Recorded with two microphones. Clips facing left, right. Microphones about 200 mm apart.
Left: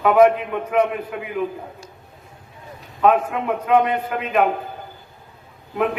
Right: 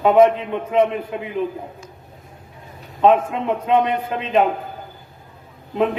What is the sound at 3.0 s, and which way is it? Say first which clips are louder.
A man's voice: right 2 dB; 25° right (ahead or behind).